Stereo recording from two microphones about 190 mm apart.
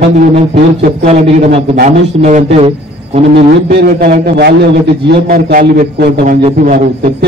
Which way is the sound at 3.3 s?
60° right (ahead or behind).